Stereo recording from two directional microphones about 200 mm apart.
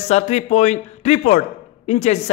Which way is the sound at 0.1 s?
35° left (ahead or behind).